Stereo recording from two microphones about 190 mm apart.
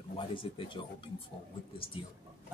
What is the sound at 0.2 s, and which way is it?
Speech, 25° left (ahead or behind).